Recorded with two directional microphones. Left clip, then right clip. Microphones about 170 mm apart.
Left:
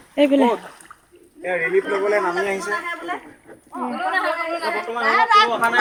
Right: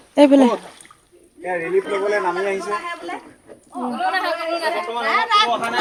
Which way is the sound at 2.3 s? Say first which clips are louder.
Even; 60° left (ahead or behind).